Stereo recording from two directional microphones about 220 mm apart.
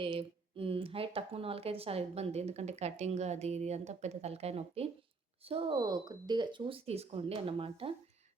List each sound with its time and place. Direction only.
0.0 s speech: 25° right (ahead or behind)